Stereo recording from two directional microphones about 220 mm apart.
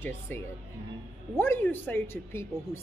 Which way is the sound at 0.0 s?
10° left (ahead or behind).